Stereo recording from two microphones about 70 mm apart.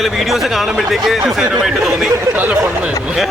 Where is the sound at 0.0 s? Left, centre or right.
Centre.